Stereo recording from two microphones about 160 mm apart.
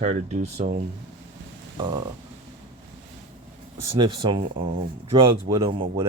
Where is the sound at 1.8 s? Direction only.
25° right (ahead or behind).